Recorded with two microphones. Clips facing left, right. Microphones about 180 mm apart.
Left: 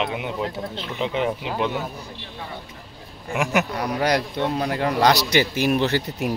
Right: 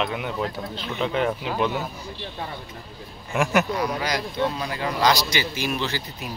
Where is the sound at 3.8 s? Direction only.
60° left (ahead or behind).